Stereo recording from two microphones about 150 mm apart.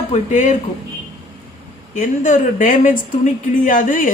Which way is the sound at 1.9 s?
65° left (ahead or behind).